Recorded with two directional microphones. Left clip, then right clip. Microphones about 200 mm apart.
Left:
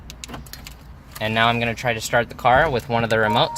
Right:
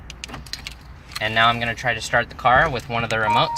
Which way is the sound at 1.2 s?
55° left (ahead or behind).